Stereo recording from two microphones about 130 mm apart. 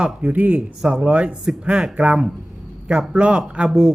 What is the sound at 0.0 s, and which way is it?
A man's voice, 10° right (ahead or behind).